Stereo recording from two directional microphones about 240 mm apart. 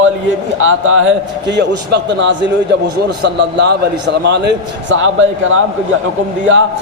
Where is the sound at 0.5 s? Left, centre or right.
Right.